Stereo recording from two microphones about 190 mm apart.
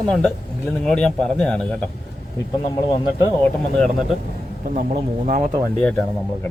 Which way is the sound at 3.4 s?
5° left (ahead or behind).